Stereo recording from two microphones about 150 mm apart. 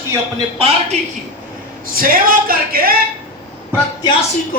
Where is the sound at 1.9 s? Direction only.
70° right (ahead or behind).